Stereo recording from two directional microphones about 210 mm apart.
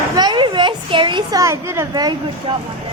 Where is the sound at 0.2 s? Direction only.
20° right (ahead or behind).